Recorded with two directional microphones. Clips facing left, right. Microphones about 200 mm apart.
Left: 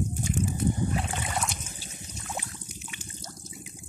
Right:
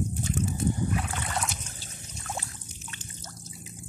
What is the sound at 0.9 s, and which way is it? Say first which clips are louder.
Boat: even; 25° left (ahead or behind).